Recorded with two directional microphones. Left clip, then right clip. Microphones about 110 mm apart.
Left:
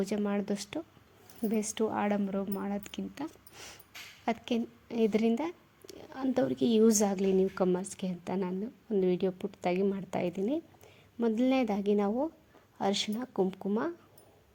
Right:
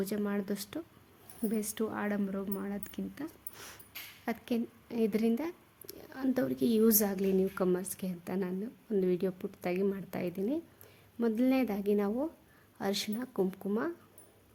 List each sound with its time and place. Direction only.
0.0 s a woman's voice: 25° left (ahead or behind)
3.5 s dog: 5° left (ahead or behind)
4.3 s a woman's voice: 25° left (ahead or behind)